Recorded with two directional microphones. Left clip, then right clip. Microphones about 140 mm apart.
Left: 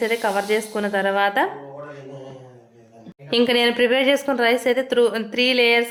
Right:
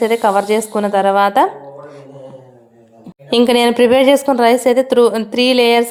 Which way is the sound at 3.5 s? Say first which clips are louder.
Right 7 dB; 40° right (ahead or behind).